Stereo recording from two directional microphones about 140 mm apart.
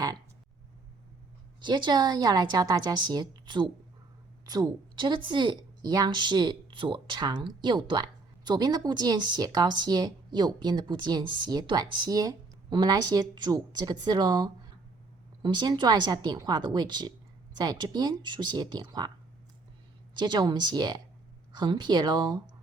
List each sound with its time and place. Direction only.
1.6 s a woman's voice: 35° right (ahead or behind)
20.1 s speech: 30° right (ahead or behind)